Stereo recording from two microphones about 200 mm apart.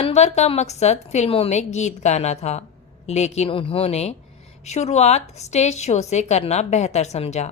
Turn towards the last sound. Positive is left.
turn(degrees=30)  # may be behind; listen again after turning